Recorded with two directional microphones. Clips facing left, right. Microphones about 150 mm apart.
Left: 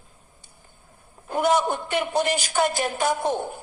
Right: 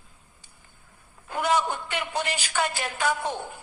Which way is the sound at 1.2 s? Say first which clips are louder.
Left 4 dB; 40° left (ahead or behind).